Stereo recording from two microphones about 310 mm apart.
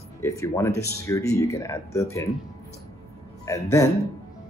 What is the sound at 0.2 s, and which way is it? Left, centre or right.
Speech, centre.